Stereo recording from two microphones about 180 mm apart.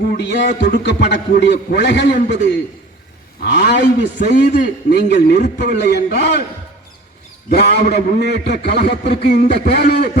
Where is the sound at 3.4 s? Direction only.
70° left (ahead or behind).